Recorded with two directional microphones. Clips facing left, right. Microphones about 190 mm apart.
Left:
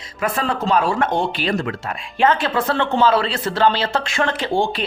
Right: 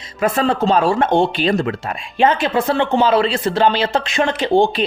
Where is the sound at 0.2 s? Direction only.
25° right (ahead or behind).